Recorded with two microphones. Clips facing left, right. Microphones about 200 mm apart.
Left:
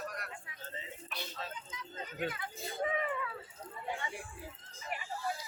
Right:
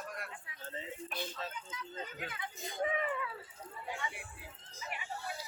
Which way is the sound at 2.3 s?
15° right (ahead or behind).